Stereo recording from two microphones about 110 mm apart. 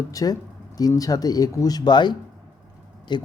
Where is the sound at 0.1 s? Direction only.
35° left (ahead or behind).